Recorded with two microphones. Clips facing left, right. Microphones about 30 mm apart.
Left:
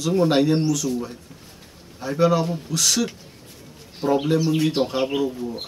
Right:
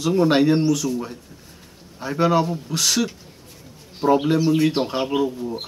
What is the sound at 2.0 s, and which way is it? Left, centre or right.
A man's voice, centre.